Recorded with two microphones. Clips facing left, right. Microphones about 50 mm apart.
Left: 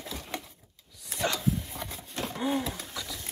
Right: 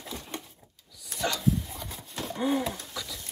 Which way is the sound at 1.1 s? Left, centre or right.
Centre.